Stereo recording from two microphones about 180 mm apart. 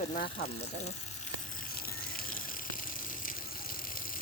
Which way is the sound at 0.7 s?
40° left (ahead or behind).